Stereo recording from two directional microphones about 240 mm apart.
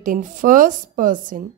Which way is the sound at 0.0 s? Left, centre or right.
Right.